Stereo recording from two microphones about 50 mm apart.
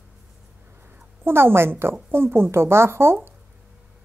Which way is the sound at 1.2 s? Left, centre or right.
Right.